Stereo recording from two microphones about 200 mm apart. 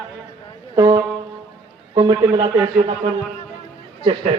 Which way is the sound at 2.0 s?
20° right (ahead or behind).